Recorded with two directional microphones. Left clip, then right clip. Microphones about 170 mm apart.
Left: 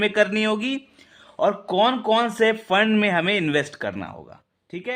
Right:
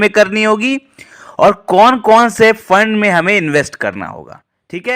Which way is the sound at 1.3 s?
45° right (ahead or behind).